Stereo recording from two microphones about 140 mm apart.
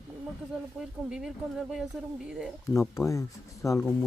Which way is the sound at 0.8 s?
5° right (ahead or behind).